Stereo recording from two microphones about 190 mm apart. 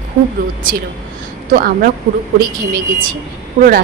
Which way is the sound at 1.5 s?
45° right (ahead or behind).